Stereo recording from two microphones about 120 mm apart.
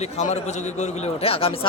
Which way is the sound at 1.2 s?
50° left (ahead or behind).